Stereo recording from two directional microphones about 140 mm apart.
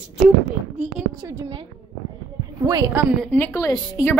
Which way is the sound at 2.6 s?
25° right (ahead or behind).